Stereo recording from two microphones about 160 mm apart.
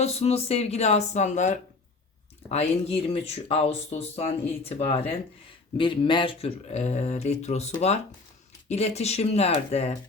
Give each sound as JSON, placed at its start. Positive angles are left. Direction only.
{"t": 0.0, "sound": "speech", "side_deg": 40}